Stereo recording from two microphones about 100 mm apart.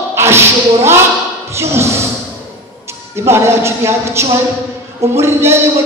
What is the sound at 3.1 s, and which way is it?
Speech, 25° right (ahead or behind).